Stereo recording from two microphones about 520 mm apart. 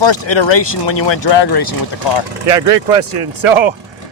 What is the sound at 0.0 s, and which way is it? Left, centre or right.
Speech, left.